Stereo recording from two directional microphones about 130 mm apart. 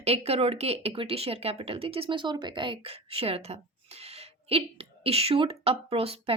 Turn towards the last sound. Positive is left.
turn(degrees=-45)  # may be behind; listen again after turning